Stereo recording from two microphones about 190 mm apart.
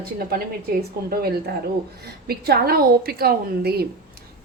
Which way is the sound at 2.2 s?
55° right (ahead or behind).